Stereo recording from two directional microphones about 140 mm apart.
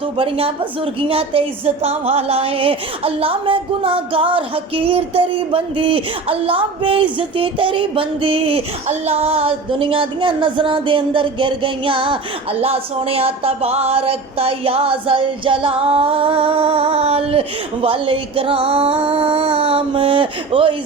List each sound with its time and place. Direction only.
0.2 s a woman's voice: 40° right (ahead or behind)